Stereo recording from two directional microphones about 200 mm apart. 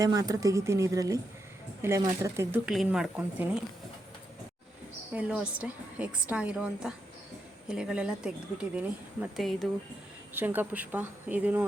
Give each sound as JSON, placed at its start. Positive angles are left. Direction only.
{"t": 0.0, "sound": "a woman's voice", "side_deg": -15}
{"t": 2.6, "sound": "speech", "side_deg": -5}
{"t": 5.1, "sound": "a woman's voice", "side_deg": -5}
{"t": 9.3, "sound": "speech", "side_deg": 0}
{"t": 10.3, "sound": "a woman's voice", "side_deg": -10}